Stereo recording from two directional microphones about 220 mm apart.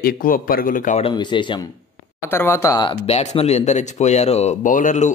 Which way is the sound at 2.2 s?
10° left (ahead or behind).